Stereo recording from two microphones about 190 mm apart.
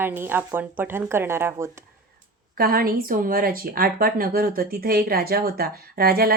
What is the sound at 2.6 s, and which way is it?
A woman's voice, 50° right (ahead or behind).